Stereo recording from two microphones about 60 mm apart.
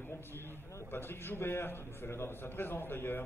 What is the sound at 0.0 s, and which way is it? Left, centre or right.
A man's voice, left.